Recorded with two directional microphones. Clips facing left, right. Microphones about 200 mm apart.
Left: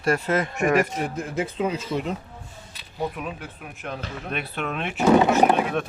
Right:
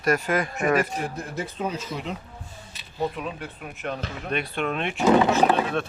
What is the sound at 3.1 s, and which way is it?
Speech, centre (ahead or behind).